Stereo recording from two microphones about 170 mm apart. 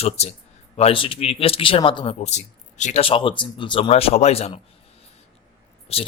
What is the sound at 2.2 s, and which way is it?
Speech, 45° left (ahead or behind).